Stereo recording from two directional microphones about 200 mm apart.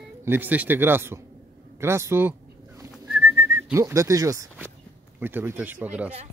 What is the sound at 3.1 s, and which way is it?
Whistling, 10° right (ahead or behind).